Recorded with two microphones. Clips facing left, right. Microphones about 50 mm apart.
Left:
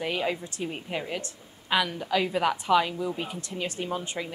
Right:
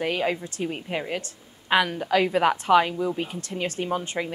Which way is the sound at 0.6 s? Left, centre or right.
Centre.